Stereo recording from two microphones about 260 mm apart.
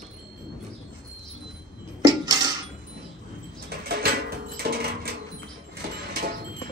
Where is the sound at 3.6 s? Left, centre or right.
Right.